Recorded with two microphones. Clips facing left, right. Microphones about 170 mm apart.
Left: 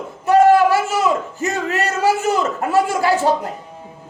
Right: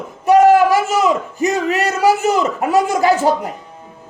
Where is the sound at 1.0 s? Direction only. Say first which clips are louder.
Right 3 dB; 15° right (ahead or behind).